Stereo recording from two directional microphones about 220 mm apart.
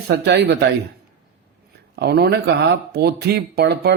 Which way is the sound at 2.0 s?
45° right (ahead or behind).